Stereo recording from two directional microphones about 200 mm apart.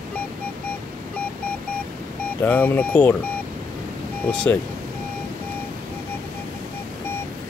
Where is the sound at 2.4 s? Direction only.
10° left (ahead or behind).